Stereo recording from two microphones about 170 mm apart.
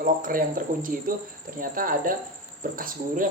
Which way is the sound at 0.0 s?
55° right (ahead or behind).